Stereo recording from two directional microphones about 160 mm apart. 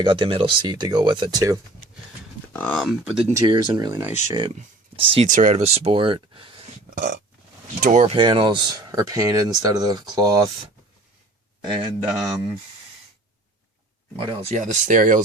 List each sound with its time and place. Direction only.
0.0 s speech: 30° right (ahead or behind)
2.5 s speech: 10° left (ahead or behind)
3.3 s speech: 25° right (ahead or behind)
5.2 s speech: 50° right (ahead or behind); by 6.7 s 35° right (ahead or behind)
6.9 s burping: 60° right (ahead or behind)
7.8 s speech: 55° right (ahead or behind)
8.0 s speech: 30° right (ahead or behind)
12.0 s speech: 5° right (ahead or behind)
14.2 s speech: 35° right (ahead or behind)
14.5 s speech: 50° right (ahead or behind)